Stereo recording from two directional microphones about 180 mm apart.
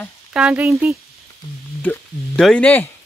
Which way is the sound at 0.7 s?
15° right (ahead or behind).